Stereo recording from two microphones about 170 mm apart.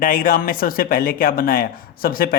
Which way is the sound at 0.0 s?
55° left (ahead or behind).